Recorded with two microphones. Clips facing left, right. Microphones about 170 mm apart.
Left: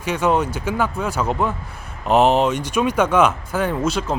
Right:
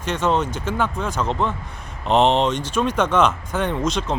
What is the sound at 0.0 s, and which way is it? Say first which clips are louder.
Speech: left 2 dB; 10° left (ahead or behind).